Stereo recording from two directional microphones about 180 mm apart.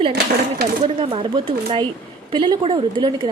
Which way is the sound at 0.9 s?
30° right (ahead or behind).